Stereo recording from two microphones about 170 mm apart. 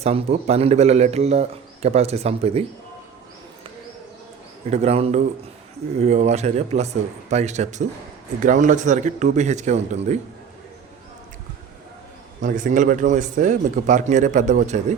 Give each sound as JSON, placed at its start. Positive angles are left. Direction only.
{"t": 0.0, "sound": "a man's voice", "side_deg": -40}
{"t": 4.7, "sound": "a man's voice", "side_deg": -40}
{"t": 12.4, "sound": "a man's voice", "side_deg": -50}